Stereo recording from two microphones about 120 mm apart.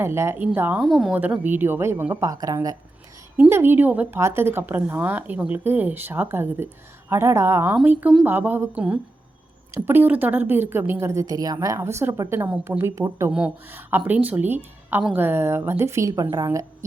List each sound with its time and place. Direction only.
0.0 s a woman's voice: 20° right (ahead or behind)
0.8 s a woman's voice: centre (ahead or behind)
1.1 s a woman's voice: 15° right (ahead or behind); by 2.7 s 30° right (ahead or behind)
3.3 s a woman's voice: 15° right (ahead or behind)
13.3 s a woman's voice: 15° right (ahead or behind); by 16.6 s 30° right (ahead or behind)